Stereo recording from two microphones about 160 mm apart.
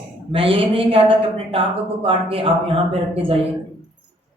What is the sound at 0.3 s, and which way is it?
Speech, 35° right (ahead or behind).